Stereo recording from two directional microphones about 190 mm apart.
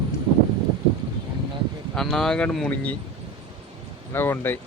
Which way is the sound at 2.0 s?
Centre (ahead or behind).